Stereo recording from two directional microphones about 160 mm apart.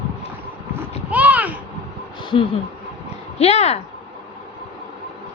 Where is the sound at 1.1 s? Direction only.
10° right (ahead or behind).